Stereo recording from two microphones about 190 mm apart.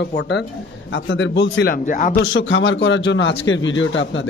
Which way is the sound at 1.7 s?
45° left (ahead or behind).